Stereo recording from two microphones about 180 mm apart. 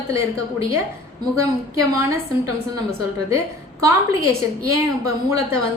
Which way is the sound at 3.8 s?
15° right (ahead or behind).